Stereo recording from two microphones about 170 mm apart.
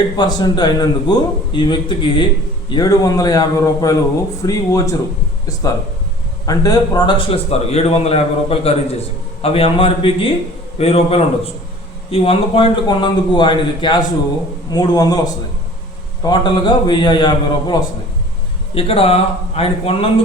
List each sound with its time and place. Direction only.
0.2 s a man's voice: 25° left (ahead or behind)
6.4 s a man's voice: 20° left (ahead or behind)